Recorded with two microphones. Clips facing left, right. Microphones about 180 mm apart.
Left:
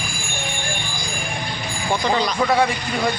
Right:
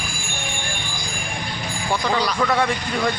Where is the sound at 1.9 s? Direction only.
20° left (ahead or behind).